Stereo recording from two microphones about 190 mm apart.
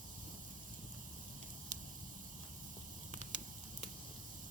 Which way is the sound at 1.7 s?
40° right (ahead or behind).